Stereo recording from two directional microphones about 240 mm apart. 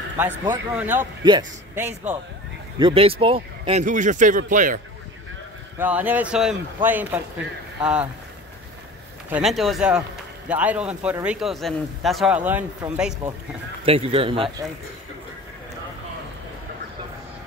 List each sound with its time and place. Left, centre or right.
0.2 s a man's voice: centre
2.8 s speech: right
5.8 s a man's voice: centre
9.3 s speech: centre
13.8 s speech: right